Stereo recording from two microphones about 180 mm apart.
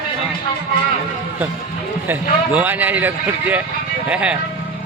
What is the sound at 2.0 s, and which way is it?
Speech, 10° right (ahead or behind).